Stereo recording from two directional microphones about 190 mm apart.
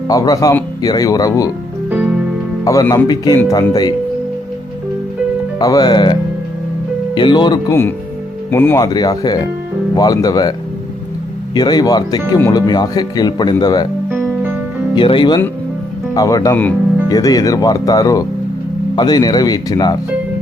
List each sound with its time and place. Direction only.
0.1 s speech: 20° left (ahead or behind)
1.9 s music: 5° right (ahead or behind)
2.6 s speech: 15° left (ahead or behind)
5.5 s speech: 20° left (ahead or behind)
7.7 s speech: 10° left (ahead or behind)
11.5 s speech: 20° left (ahead or behind)
14.1 s music: 10° right (ahead or behind)
14.9 s speech: 25° left (ahead or behind)